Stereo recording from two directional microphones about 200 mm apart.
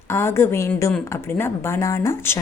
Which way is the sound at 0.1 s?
10° left (ahead or behind).